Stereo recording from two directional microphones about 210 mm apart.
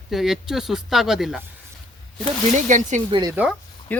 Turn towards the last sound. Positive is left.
turn(degrees=5)  # may be behind; listen again after turning